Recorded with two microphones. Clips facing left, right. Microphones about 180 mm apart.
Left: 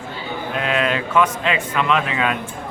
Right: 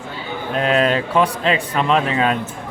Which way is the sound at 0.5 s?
35° right (ahead or behind).